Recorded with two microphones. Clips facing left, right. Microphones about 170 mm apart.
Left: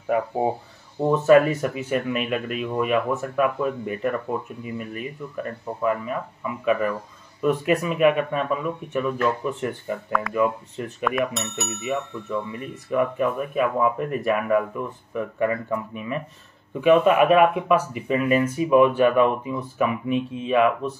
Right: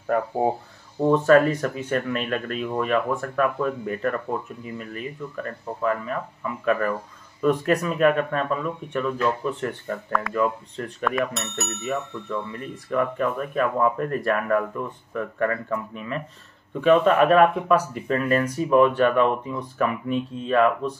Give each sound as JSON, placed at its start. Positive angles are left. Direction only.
{"t": 0.0, "sound": "speech", "side_deg": 5}